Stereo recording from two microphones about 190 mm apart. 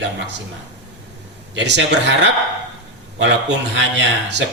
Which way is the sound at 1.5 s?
65° right (ahead or behind).